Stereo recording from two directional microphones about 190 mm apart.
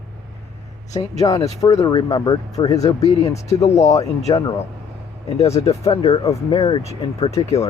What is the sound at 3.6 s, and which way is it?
Speech, 35° left (ahead or behind).